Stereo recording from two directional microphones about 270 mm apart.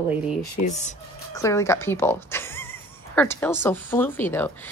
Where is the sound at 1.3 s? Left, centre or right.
Centre.